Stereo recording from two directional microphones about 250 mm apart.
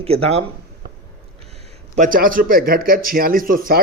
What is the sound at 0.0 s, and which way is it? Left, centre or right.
Speech, right.